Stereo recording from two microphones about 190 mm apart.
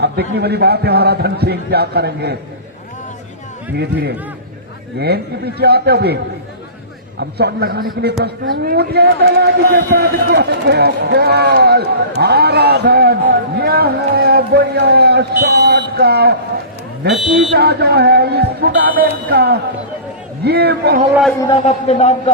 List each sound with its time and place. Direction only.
0.0 s a man's voice: 60° right (ahead or behind)
4.9 s a man's voice: 60° right (ahead or behind)
7.2 s a man's voice: 60° right (ahead or behind)
21.1 s a man's voice: centre (ahead or behind)
21.6 s a man's voice: 35° left (ahead or behind)